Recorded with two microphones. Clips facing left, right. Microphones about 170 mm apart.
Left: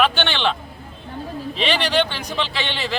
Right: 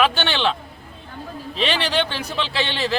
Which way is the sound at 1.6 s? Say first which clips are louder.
Left 1 dB; centre (ahead or behind).